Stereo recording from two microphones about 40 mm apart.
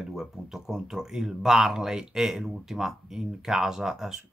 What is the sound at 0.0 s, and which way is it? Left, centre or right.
Speech, centre.